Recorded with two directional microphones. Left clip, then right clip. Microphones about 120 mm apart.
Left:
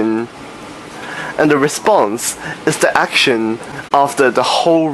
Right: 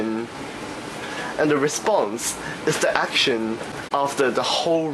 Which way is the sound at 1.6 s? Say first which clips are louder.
Left 8 dB; 25° left (ahead or behind).